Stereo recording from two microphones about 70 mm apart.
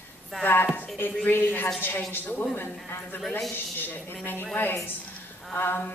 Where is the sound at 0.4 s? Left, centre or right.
Left.